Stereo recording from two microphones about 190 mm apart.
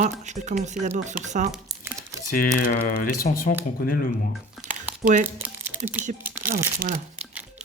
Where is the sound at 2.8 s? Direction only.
45° left (ahead or behind).